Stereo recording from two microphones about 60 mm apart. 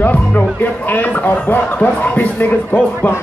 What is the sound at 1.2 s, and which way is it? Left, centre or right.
Speech, left.